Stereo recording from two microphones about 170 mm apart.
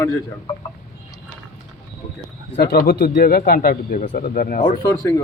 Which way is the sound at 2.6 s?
65° left (ahead or behind).